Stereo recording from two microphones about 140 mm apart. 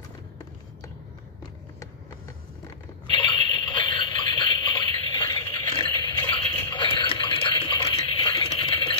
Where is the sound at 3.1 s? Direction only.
35° left (ahead or behind).